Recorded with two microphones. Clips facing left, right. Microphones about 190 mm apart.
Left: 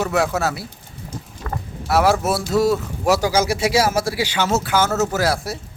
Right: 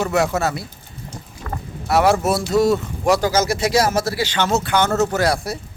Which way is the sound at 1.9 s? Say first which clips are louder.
Right 1 dB; centre (ahead or behind).